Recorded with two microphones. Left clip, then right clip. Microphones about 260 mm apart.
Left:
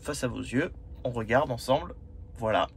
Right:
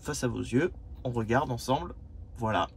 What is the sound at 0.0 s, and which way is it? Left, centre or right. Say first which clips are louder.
Speech: left 1 dB; right.